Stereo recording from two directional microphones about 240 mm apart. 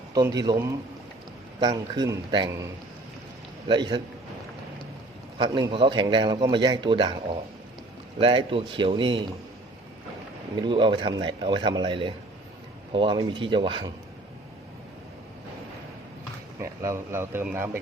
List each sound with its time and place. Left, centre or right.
0.1 s a man's voice: centre
3.7 s a man's voice: centre
5.4 s a man's voice: centre
8.2 s a man's voice: right
10.6 s a man's voice: centre
16.6 s a man's voice: centre